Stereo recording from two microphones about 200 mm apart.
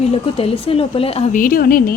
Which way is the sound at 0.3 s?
30° left (ahead or behind).